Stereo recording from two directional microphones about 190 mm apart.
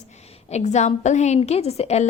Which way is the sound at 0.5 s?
35° left (ahead or behind).